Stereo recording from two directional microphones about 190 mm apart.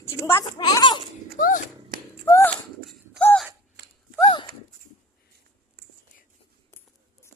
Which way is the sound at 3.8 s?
65° right (ahead or behind).